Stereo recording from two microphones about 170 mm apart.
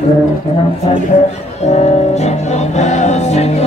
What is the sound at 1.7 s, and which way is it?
Music, 40° left (ahead or behind).